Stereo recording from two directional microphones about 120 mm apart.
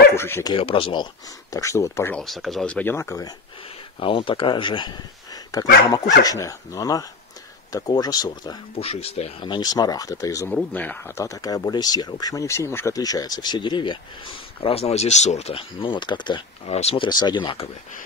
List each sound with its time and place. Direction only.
0.1 s bow-wow: 20° left (ahead or behind)
0.6 s speech: 50° left (ahead or behind)
1.5 s speech: 25° left (ahead or behind)
2.1 s speech: centre (ahead or behind); by 3.3 s 25° left (ahead or behind)
4.0 s speech: 45° left (ahead or behind)
8.7 s speech: 55° left (ahead or behind)
9.4 s speech: 35° left (ahead or behind)
10.5 s speech: 15° left (ahead or behind); by 16.4 s 40° left (ahead or behind)
16.6 s speech: 60° left (ahead or behind)
17.0 s speech: 40° left (ahead or behind)